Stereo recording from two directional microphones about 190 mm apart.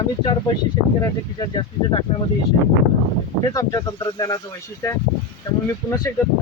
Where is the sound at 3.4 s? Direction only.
20° left (ahead or behind).